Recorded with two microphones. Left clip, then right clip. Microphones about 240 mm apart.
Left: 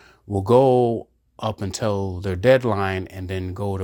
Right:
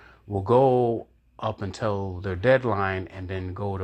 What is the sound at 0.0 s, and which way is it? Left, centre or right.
Speech, left.